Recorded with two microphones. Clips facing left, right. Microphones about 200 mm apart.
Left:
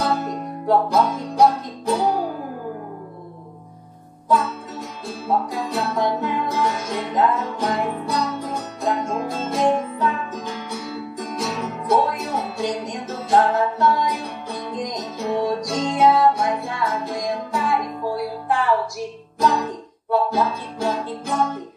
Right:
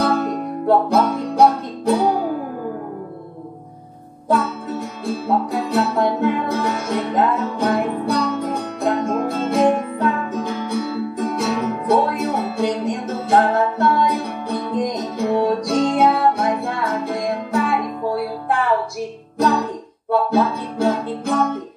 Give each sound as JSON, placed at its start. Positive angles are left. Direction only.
{"t": 0.0, "sound": "music", "side_deg": -60}
{"t": 4.3, "sound": "music", "side_deg": -60}